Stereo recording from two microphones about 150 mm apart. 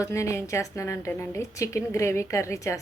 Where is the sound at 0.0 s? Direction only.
20° left (ahead or behind).